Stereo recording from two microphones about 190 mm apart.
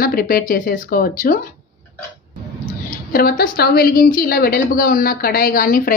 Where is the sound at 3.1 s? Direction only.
50° left (ahead or behind).